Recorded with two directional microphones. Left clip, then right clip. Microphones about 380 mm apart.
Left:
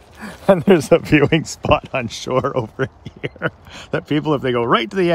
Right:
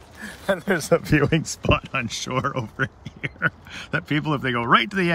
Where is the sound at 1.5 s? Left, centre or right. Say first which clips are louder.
Left 6 dB; centre.